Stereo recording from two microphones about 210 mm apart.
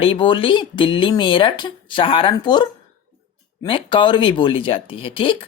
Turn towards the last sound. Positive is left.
turn(degrees=25)  # may be behind; listen again after turning